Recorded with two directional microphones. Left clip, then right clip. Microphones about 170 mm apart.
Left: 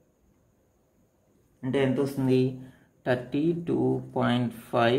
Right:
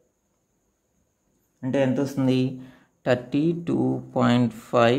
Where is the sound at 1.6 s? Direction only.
65° right (ahead or behind).